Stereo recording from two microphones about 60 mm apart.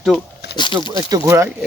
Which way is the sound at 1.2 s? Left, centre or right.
Right.